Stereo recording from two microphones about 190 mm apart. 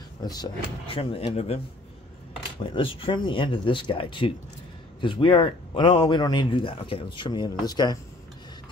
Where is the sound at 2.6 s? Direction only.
30° left (ahead or behind).